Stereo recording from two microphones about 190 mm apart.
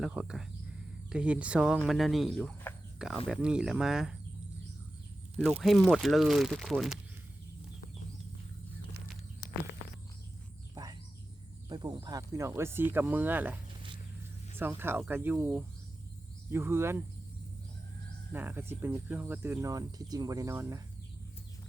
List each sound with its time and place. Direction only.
0.0 s speech: 5° right (ahead or behind)
5.4 s speech: centre (ahead or behind)
9.4 s a sound: 50° left (ahead or behind)
11.7 s speech: 20° right (ahead or behind)
18.3 s speech: 10° right (ahead or behind)